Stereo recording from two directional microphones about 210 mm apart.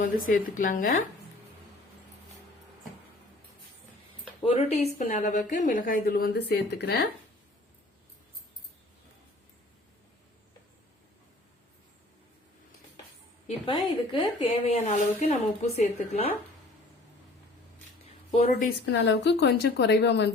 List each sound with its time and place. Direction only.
0.0 s a woman's voice: 40° left (ahead or behind)
4.4 s a woman's voice: 30° left (ahead or behind); by 7.1 s 50° left (ahead or behind)
13.7 s a woman's voice: 25° left (ahead or behind)
18.9 s a woman's voice: 55° left (ahead or behind)